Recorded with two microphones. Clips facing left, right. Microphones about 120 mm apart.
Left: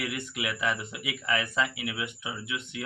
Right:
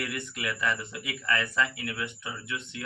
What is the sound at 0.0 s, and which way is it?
Speech, 20° left (ahead or behind).